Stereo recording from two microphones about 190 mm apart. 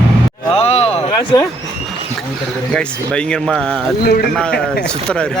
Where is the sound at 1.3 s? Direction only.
20° left (ahead or behind).